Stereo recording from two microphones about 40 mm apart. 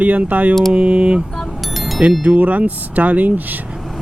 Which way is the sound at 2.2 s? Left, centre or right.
Right.